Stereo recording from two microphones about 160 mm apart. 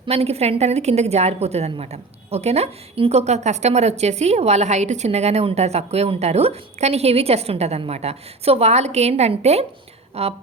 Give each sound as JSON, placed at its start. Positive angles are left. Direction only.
{"t": 0.0, "sound": "a woman's voice", "side_deg": -40}